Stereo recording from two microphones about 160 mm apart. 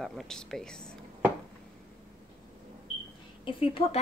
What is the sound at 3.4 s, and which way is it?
Speech, 35° left (ahead or behind).